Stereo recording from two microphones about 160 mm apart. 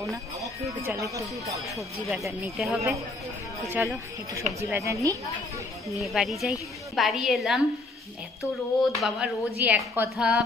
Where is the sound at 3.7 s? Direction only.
15° right (ahead or behind).